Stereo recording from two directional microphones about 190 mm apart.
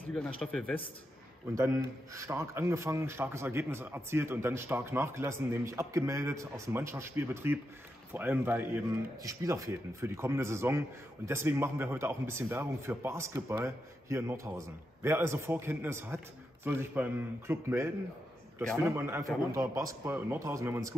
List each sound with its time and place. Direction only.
0.0 s speech: 5° left (ahead or behind)
1.5 s a man's voice: 15° right (ahead or behind)